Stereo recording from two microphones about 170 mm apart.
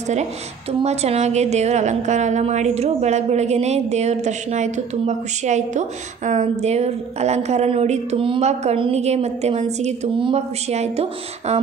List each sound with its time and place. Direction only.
0.0 s a woman's voice: 40° right (ahead or behind)